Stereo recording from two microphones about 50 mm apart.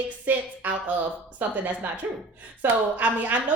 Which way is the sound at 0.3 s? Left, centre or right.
Right.